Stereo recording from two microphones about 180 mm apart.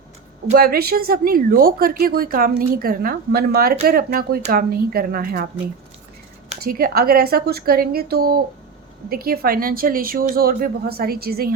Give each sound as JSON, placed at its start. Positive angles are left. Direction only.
{"t": 0.5, "sound": "speech", "side_deg": -55}
{"t": 6.6, "sound": "speech", "side_deg": -55}